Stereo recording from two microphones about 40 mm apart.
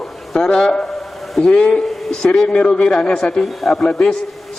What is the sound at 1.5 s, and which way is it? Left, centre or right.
Speech, left.